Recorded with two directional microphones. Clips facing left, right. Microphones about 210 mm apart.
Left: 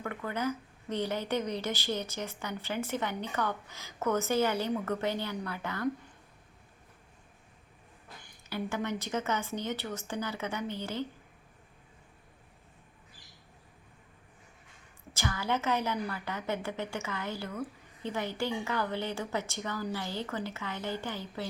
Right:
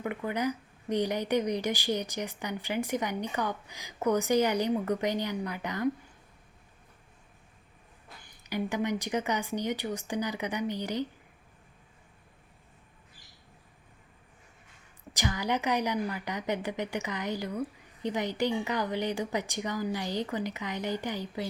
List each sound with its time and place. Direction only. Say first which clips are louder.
0.0 s speech: right 3 dB; 15° right (ahead or behind)
8.4 s speech: right 3 dB; 15° right (ahead or behind)
15.1 s speech: right 2 dB; 15° right (ahead or behind)